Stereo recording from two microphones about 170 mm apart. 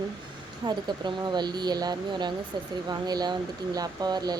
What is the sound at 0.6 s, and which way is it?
Speech, 25° right (ahead or behind).